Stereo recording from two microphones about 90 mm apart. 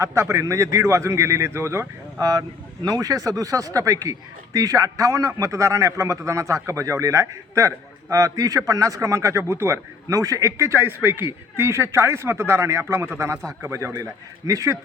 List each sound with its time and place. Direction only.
0.0 s a man's voice: 30° right (ahead or behind)
2.8 s a man's voice: 45° right (ahead or behind)